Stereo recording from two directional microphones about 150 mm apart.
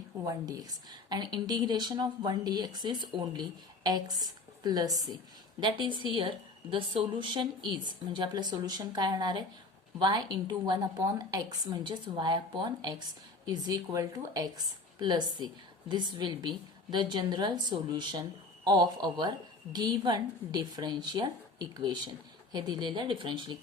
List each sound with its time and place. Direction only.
0.3 s a woman's voice: 20° right (ahead or behind)